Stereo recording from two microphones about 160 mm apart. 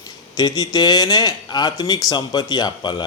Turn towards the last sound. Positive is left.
turn(degrees=30)  # may be behind; listen again after turning